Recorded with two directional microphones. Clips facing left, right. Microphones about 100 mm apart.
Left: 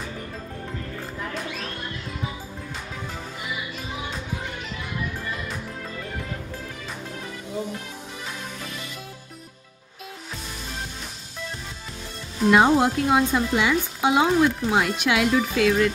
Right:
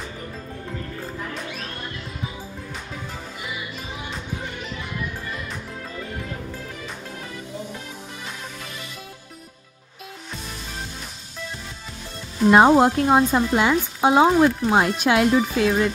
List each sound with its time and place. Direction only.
12.4 s speech: 45° right (ahead or behind)
15.5 s speech: 25° right (ahead or behind)